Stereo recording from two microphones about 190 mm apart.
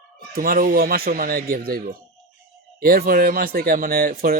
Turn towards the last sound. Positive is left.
turn(degrees=-50)  # may be behind; listen again after turning